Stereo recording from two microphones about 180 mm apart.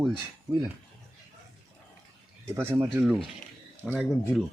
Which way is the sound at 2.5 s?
15° right (ahead or behind).